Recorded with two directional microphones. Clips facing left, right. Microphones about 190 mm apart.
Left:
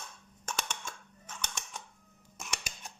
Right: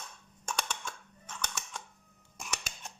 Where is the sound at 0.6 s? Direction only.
Centre (ahead or behind).